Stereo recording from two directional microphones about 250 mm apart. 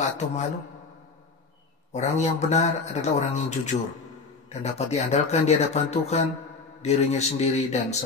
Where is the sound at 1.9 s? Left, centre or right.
Left.